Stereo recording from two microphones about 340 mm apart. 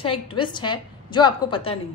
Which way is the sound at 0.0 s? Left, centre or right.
Centre.